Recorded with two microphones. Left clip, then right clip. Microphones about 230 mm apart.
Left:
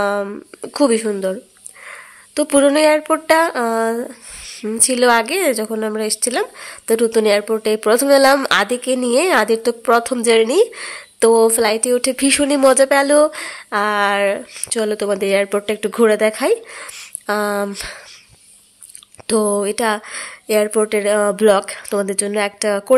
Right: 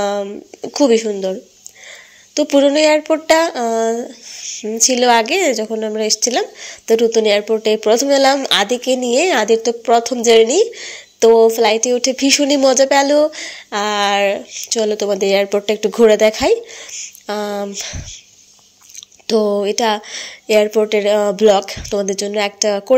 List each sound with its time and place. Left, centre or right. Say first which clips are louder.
0.0 s a woman's voice: even; centre
4.5 s a sound: right 2 dB; centre
4.7 s a woman's voice: right 2 dB; centre
19.2 s a woman's voice: right 2 dB; centre